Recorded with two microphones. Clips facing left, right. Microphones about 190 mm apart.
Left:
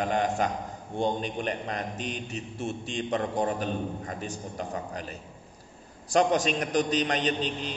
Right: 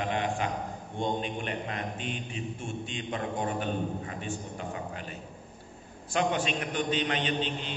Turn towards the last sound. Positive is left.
turn(degrees=40)  # may be behind; listen again after turning